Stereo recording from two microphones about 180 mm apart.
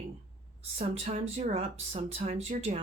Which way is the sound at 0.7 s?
35° right (ahead or behind).